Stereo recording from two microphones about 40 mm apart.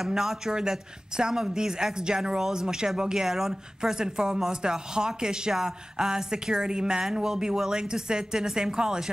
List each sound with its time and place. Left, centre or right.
0.0 s a woman's voice: centre